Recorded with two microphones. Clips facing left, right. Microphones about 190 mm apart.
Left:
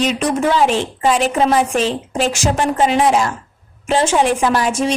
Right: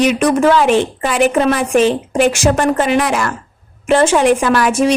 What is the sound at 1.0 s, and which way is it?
A woman's voice, 60° right (ahead or behind).